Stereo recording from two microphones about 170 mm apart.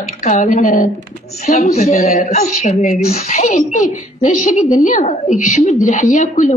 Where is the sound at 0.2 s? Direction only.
45° left (ahead or behind).